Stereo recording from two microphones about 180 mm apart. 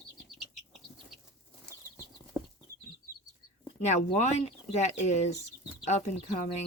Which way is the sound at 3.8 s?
40° left (ahead or behind).